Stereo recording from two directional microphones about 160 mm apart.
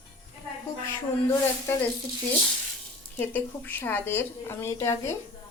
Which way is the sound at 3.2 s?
10° left (ahead or behind).